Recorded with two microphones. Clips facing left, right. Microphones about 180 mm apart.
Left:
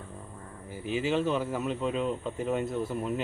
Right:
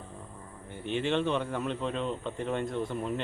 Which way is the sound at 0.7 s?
5° left (ahead or behind).